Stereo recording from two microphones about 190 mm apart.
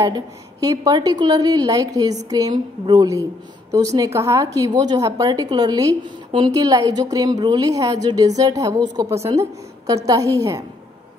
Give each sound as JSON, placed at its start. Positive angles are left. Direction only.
{"t": 0.0, "sound": "a woman's voice", "side_deg": -20}